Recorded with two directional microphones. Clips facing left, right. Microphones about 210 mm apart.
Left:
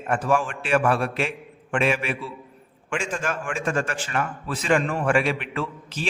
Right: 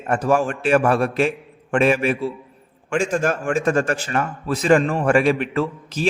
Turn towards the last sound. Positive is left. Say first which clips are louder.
# right 7 dB
turn(degrees=-40)  # may be behind; listen again after turning